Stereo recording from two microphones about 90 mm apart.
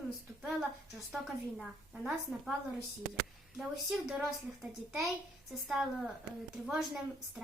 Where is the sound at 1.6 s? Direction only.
5° right (ahead or behind).